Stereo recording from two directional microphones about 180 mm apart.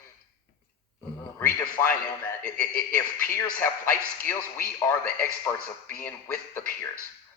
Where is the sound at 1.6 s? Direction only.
10° left (ahead or behind).